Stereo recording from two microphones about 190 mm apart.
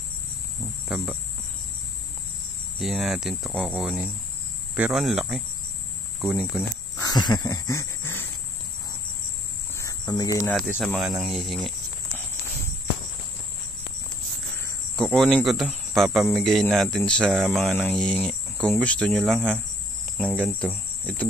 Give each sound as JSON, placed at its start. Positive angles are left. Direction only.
{"t": 0.8, "sound": "cricket", "side_deg": -5}
{"t": 2.8, "sound": "speech", "side_deg": 0}
{"t": 7.0, "sound": "dog", "side_deg": 20}
{"t": 9.8, "sound": "cricket", "side_deg": 20}
{"t": 10.5, "sound": "speech", "side_deg": -5}
{"t": 15.0, "sound": "speech", "side_deg": 0}
{"t": 20.5, "sound": "speech", "side_deg": 5}